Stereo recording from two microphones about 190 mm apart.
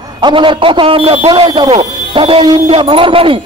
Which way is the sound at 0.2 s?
25° right (ahead or behind).